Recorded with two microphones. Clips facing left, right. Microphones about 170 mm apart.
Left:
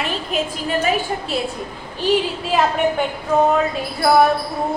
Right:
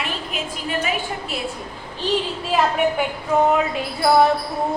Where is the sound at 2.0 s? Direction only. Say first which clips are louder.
Left 4 dB; 10° left (ahead or behind).